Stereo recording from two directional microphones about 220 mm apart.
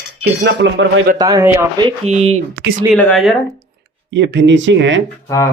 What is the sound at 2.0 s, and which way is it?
Speech, 30° right (ahead or behind).